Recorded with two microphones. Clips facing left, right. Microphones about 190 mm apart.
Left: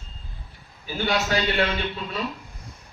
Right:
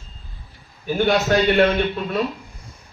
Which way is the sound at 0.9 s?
55° right (ahead or behind).